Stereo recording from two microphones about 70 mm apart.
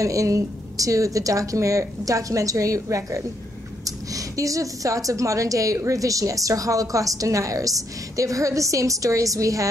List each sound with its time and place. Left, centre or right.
0.0 s a woman's voice: right